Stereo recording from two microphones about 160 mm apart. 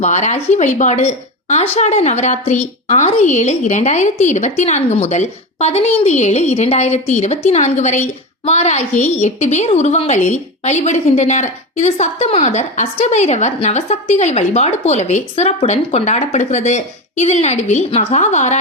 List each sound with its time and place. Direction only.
0.0 s a woman's voice: 45° left (ahead or behind)